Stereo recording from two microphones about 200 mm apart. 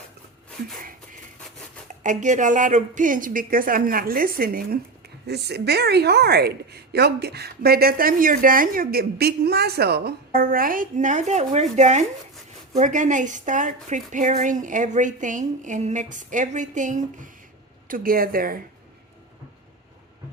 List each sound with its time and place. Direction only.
2.0 s a woman's voice: 40° right (ahead or behind)